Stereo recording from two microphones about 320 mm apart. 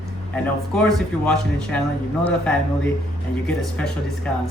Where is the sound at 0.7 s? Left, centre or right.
Centre.